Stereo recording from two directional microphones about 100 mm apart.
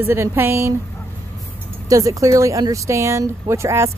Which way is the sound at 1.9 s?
35° right (ahead or behind).